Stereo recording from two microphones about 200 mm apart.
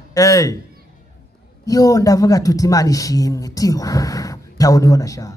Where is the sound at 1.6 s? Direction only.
15° left (ahead or behind).